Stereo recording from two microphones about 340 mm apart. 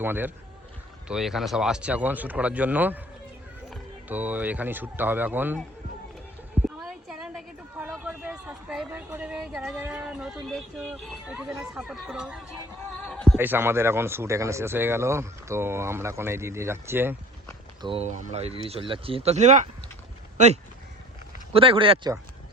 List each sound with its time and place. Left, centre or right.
0.0 s speech: centre
4.1 s speech: centre
6.7 s speech: centre
21.5 s speech: centre